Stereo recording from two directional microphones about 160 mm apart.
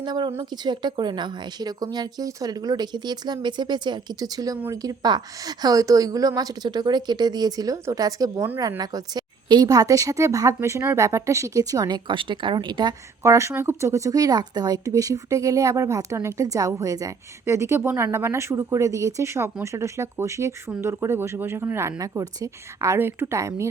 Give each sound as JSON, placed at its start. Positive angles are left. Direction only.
{"t": 0.0, "sound": "a woman's voice", "side_deg": -25}